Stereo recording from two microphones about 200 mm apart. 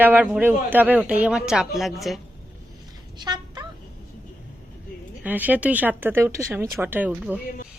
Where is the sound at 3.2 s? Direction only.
20° right (ahead or behind).